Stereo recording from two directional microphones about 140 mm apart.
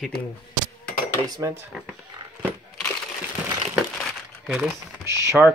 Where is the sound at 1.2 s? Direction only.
30° right (ahead or behind).